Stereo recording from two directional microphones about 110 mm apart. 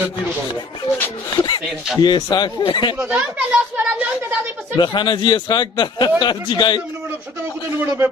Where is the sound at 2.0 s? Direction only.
40° left (ahead or behind).